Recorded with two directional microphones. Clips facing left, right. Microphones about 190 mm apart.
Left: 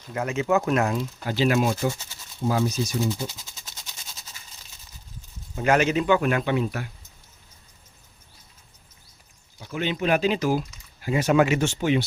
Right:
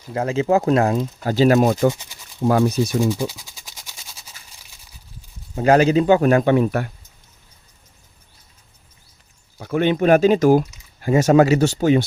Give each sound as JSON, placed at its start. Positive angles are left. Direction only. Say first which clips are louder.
{"t": 0.1, "sound": "speech", "louder": "right 5 dB", "side_deg": -30}
{"t": 2.4, "sound": "speech", "louder": "right 7 dB", "side_deg": -60}
{"t": 3.2, "sound": "a sound", "louder": "right 7 dB", "side_deg": -10}
{"t": 5.5, "sound": "speech", "louder": "right 7 dB", "side_deg": -35}
{"t": 9.6, "sound": "speech", "louder": "right 9 dB", "side_deg": -55}